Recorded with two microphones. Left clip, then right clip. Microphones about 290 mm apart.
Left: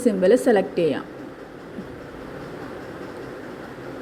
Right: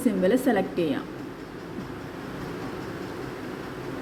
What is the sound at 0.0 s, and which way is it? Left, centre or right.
Speech, centre.